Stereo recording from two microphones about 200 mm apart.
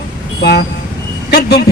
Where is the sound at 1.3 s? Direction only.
50° left (ahead or behind).